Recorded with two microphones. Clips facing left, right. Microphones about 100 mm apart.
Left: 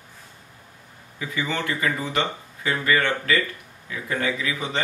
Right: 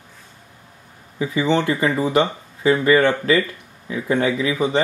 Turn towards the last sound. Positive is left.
turn(degrees=-25)  # may be behind; listen again after turning